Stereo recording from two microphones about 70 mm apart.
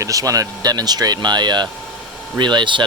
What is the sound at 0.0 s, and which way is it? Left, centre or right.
Speech, right.